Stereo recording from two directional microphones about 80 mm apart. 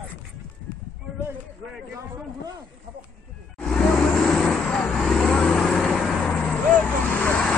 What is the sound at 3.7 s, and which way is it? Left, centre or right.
Vehicle, centre.